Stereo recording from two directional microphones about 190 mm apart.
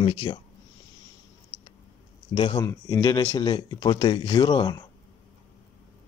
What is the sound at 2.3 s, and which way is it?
Speech, 25° left (ahead or behind).